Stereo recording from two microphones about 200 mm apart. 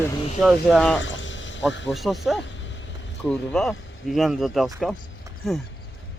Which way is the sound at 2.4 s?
65° left (ahead or behind).